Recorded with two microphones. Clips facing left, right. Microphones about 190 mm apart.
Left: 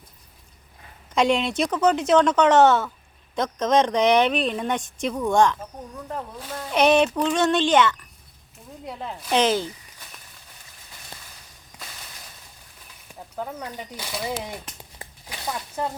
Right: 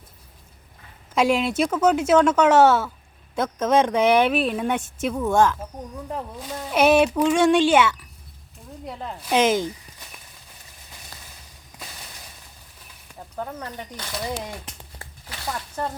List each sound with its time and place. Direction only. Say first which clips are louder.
1.1 s speech: right 1 dB; 5° right (ahead or behind)
9.4 s speech: right 2 dB; 15° right (ahead or behind)
13.1 s speech: even; 5° left (ahead or behind)
14.9 s a sound: left 3 dB; 20° left (ahead or behind)
15.4 s speech: even; 10° left (ahead or behind)